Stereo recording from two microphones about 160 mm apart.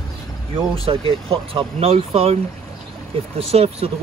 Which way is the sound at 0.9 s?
35° right (ahead or behind).